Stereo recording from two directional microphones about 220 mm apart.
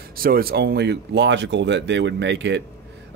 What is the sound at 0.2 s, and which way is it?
Speech, 45° right (ahead or behind).